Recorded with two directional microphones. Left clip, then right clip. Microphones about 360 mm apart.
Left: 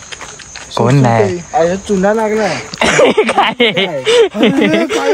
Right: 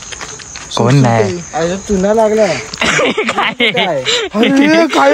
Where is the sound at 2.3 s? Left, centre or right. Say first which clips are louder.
Right 3 dB; centre.